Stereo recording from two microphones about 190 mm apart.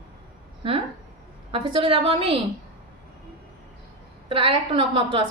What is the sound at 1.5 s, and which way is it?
Speech, 30° right (ahead or behind).